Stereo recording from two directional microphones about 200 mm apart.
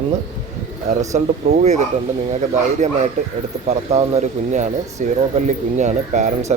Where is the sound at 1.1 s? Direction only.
35° right (ahead or behind).